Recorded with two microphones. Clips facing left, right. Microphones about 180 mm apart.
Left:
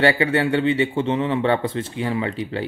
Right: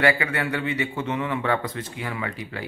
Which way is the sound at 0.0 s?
30° left (ahead or behind).